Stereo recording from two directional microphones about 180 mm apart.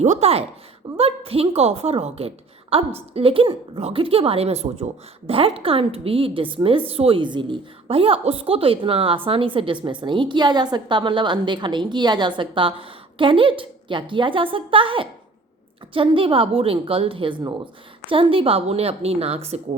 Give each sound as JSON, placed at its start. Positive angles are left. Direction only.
{"t": 0.0, "sound": "a woman's voice", "side_deg": -40}